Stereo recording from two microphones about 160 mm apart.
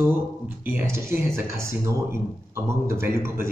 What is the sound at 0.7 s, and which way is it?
Speech, 15° right (ahead or behind).